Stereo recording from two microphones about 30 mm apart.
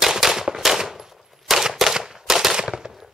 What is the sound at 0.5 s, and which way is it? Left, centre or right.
Machine gun, centre.